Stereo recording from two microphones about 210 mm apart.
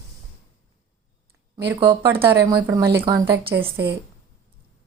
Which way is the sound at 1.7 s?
20° right (ahead or behind).